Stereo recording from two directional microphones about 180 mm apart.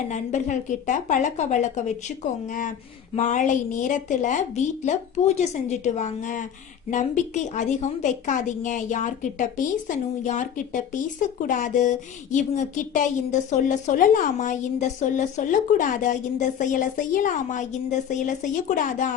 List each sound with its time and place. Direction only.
0.1 s a woman's voice: 45° left (ahead or behind)